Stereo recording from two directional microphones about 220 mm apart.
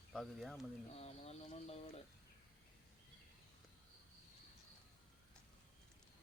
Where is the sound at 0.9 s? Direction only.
30° left (ahead or behind).